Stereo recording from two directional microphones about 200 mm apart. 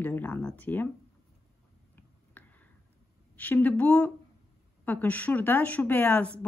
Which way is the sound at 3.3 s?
10° left (ahead or behind).